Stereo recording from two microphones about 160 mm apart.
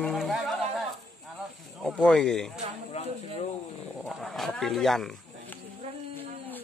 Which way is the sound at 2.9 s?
40° left (ahead or behind).